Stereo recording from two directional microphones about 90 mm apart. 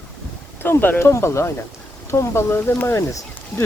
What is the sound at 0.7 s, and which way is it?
Speech, 25° left (ahead or behind).